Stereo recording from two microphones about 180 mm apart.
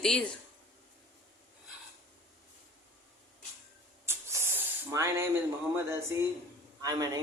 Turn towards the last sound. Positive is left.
turn(degrees=-20)  # may be behind; listen again after turning